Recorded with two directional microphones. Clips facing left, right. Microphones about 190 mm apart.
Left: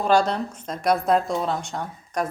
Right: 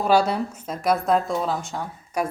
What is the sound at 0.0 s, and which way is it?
A woman's voice, 5° right (ahead or behind).